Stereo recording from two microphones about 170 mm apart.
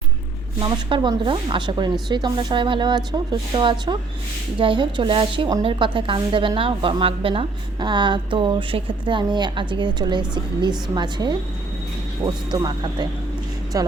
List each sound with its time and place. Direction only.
0.6 s a woman's voice: 30° right (ahead or behind)